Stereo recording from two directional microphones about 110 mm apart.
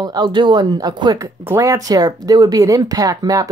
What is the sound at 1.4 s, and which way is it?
Speech, 25° right (ahead or behind).